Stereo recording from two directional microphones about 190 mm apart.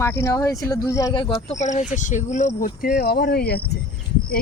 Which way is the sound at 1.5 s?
35° left (ahead or behind).